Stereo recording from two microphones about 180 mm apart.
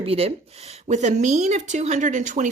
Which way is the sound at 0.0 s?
35° right (ahead or behind).